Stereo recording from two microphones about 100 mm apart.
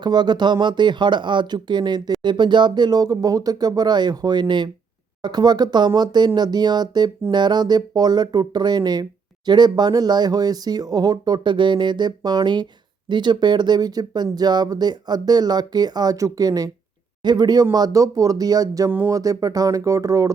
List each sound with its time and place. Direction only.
0.0 s speech: 45° right (ahead or behind)
18.9 s speech: 20° right (ahead or behind)
19.1 s speech: 35° right (ahead or behind)